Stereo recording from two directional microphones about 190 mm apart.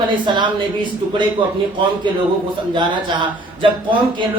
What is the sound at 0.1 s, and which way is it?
Speech, 25° right (ahead or behind).